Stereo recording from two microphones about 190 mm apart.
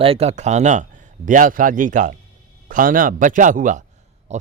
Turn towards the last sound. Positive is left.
turn(degrees=-35)  # may be behind; listen again after turning